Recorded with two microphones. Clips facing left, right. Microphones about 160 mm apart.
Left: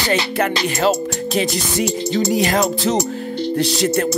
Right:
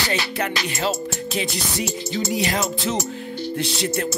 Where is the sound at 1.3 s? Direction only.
40° left (ahead or behind).